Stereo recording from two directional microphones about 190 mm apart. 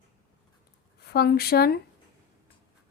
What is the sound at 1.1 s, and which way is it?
Speech, 55° left (ahead or behind).